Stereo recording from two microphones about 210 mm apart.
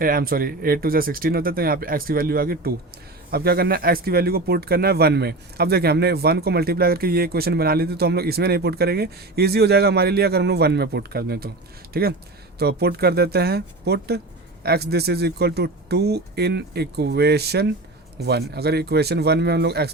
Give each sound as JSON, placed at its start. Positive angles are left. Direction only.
{"t": 0.0, "sound": "speech", "side_deg": -45}